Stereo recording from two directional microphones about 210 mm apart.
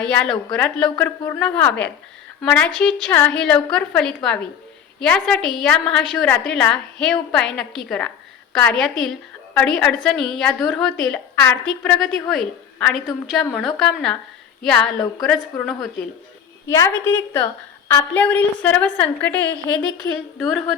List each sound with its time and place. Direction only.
0.0 s a woman's voice: 5° left (ahead or behind)
16.6 s a woman's voice: 15° left (ahead or behind)
19.5 s a sound: 20° right (ahead or behind)